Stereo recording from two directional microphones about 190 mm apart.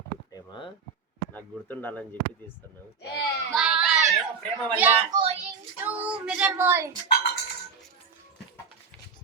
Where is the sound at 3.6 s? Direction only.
5° right (ahead or behind).